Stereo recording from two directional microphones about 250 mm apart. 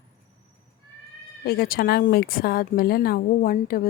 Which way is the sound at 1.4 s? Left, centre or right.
Left.